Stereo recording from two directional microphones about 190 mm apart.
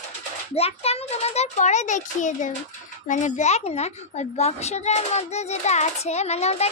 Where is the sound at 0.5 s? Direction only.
30° left (ahead or behind).